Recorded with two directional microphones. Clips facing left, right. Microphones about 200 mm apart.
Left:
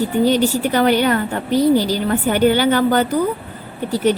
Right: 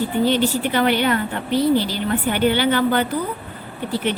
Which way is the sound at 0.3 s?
40° left (ahead or behind).